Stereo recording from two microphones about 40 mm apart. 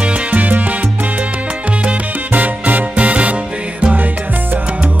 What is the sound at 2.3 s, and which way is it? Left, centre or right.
Music, right.